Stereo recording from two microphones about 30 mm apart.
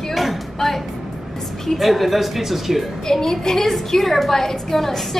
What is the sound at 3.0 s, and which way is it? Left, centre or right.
A woman's voice, centre.